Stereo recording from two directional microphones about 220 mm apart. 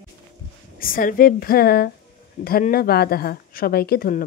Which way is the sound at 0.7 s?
40° left (ahead or behind).